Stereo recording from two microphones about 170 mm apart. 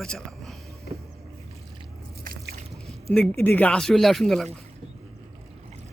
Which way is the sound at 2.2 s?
55° right (ahead or behind).